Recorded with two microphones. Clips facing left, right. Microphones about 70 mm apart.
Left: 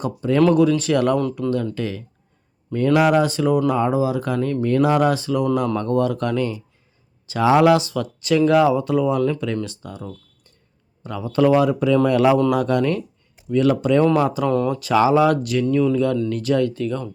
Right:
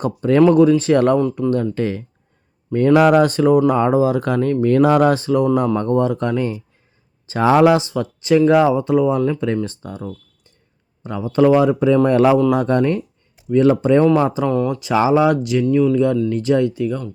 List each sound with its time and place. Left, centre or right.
0.0 s speech: right
0.3 s speech: right
5.7 s speech: right
14.0 s speech: centre
14.8 s speech: right
15.7 s speech: centre
16.3 s speech: right
16.7 s speech: centre